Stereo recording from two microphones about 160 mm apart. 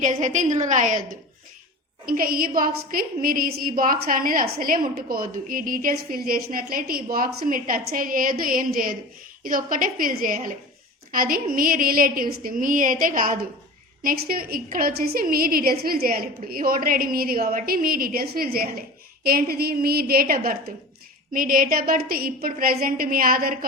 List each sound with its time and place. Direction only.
0.0 s a woman's voice: 50° right (ahead or behind)
2.0 s a woman's voice: 65° right (ahead or behind)